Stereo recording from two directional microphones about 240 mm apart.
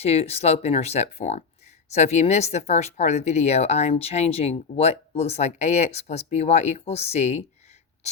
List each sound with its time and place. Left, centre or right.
0.0 s speech: left